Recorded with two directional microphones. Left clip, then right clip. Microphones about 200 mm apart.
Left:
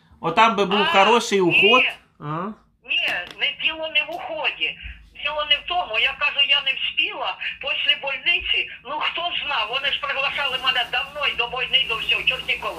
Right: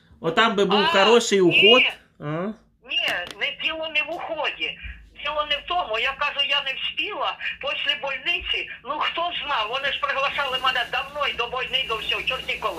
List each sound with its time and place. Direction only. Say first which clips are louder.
0.2 s speech: left 3 dB; 5° right (ahead or behind)
2.9 s a sound: left 2 dB; 45° right (ahead or behind)
5.2 s speech: left 3 dB; 40° right (ahead or behind)